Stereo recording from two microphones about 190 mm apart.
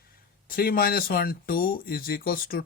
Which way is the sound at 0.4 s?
50° left (ahead or behind).